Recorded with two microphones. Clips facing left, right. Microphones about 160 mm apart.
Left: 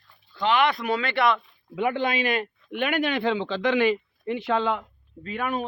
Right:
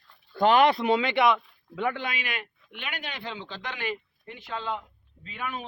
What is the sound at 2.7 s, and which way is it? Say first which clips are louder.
Speech: left 14 dB; 55° left (ahead or behind).